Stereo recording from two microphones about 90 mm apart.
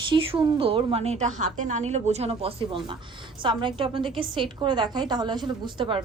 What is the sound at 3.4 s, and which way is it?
A woman's voice, 70° right (ahead or behind).